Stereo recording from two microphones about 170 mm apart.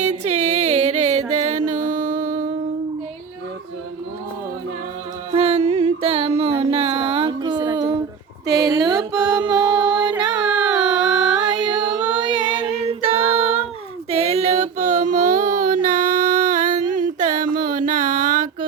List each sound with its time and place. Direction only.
0.0 s music: 40° right (ahead or behind)
5.3 s music: 35° right (ahead or behind)
8.4 s mantra: 20° right (ahead or behind)
10.0 s carnatic music: 25° right (ahead or behind)
10.4 s a sound: 5° right (ahead or behind)
11.8 s female singing: 25° right (ahead or behind)
14.1 s child singing: 35° right (ahead or behind)